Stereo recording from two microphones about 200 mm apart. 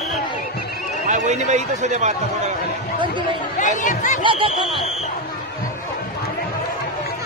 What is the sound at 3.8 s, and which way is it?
Speech, 40° left (ahead or behind).